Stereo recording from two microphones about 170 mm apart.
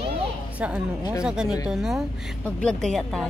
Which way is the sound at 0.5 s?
10° right (ahead or behind).